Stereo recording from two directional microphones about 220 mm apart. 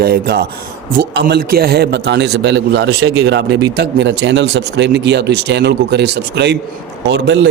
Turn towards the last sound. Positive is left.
turn(degrees=-55)  # may be behind; listen again after turning